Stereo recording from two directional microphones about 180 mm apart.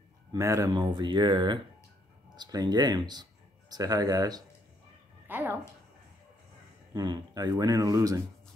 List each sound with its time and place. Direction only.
0.3 s speech: 15° right (ahead or behind)
6.9 s speech: 20° right (ahead or behind)